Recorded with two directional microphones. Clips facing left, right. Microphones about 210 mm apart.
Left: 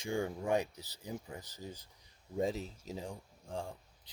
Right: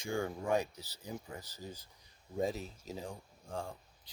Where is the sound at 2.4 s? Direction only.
25° left (ahead or behind).